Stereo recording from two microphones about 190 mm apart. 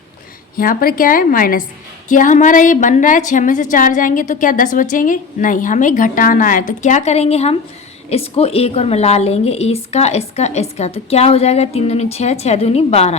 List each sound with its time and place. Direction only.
0.5 s a woman's voice: 50° left (ahead or behind); by 13.1 s 35° left (ahead or behind)